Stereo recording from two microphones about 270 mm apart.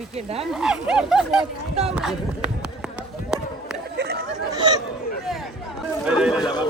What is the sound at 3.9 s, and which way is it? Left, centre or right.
Chatter, right.